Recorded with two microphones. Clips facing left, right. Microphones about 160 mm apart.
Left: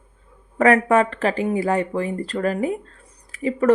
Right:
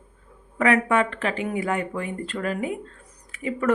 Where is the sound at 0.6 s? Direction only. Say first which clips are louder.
Left 5 dB; 40° left (ahead or behind).